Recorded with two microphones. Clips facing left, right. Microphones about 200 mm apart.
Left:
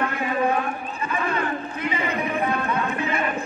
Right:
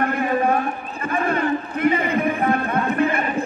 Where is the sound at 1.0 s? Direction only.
55° right (ahead or behind).